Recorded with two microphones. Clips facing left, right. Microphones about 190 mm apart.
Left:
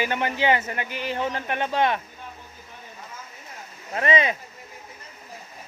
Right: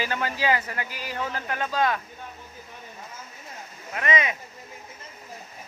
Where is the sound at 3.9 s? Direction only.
30° left (ahead or behind).